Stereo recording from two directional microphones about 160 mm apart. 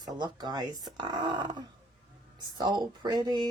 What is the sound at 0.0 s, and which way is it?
Speech, 25° right (ahead or behind).